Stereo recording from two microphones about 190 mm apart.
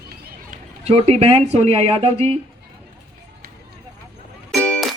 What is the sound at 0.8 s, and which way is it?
Speech, 30° right (ahead or behind).